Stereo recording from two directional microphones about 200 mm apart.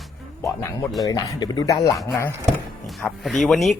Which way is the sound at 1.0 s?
20° left (ahead or behind).